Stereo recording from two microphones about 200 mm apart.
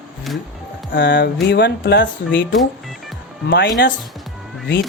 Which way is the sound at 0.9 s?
65° left (ahead or behind).